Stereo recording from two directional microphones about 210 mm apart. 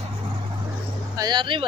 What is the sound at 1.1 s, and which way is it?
Speech, 20° right (ahead or behind).